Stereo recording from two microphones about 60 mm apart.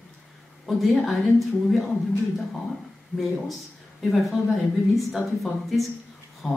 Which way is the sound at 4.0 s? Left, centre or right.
Centre.